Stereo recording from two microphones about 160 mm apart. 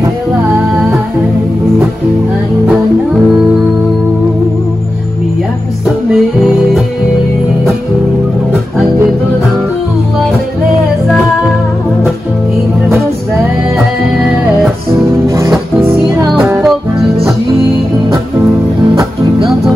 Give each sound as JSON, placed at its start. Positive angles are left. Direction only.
{"t": 15.2, "sound": "music", "side_deg": -20}
{"t": 16.3, "sound": "music", "side_deg": -5}